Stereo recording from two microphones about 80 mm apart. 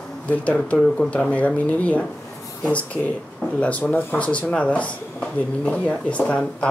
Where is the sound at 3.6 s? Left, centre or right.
Centre.